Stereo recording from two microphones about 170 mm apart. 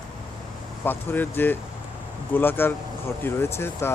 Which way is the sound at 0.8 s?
10° left (ahead or behind).